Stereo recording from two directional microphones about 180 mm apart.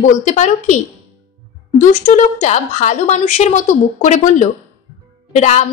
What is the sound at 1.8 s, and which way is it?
A woman's voice, 45° left (ahead or behind).